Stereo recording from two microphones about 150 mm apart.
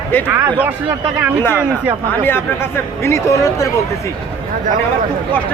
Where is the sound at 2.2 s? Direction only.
15° left (ahead or behind).